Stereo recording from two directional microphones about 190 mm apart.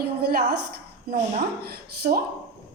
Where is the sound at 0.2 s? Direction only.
55° right (ahead or behind).